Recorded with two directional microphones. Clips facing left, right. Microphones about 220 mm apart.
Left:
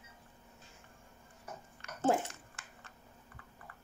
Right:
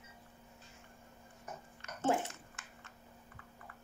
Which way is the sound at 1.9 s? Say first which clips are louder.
Left 2 dB; 35° left (ahead or behind).